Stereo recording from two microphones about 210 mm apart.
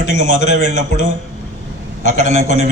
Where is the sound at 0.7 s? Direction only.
35° right (ahead or behind).